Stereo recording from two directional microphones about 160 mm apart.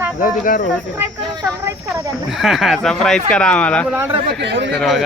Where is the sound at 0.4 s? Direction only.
60° left (ahead or behind).